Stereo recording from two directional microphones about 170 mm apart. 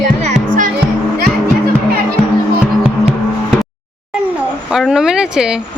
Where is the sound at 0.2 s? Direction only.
50° right (ahead or behind).